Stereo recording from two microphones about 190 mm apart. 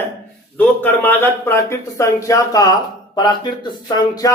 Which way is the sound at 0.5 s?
10° left (ahead or behind).